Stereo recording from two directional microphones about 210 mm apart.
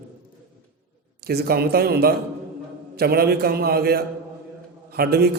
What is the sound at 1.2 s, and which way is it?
A man's voice, 50° right (ahead or behind).